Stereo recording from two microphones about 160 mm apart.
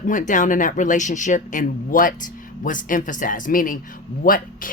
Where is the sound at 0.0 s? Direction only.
55° left (ahead or behind).